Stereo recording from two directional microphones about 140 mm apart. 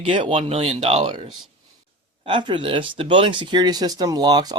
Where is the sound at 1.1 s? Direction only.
35° right (ahead or behind).